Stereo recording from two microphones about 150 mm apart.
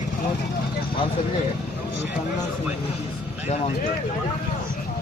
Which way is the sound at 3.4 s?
45° left (ahead or behind).